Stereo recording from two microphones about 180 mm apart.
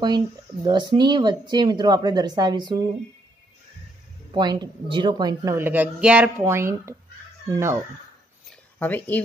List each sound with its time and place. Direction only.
0.7 s speech: 25° right (ahead or behind)
4.3 s a woman's voice: 25° right (ahead or behind)
8.7 s speech: 10° left (ahead or behind)